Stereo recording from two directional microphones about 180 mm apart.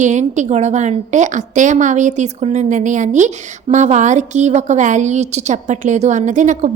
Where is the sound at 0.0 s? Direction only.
40° right (ahead or behind).